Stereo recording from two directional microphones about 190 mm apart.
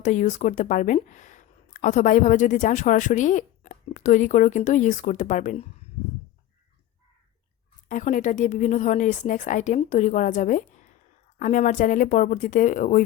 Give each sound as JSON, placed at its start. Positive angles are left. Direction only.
{"t": 0.0, "sound": "speech", "side_deg": 40}
{"t": 7.9, "sound": "speech", "side_deg": 40}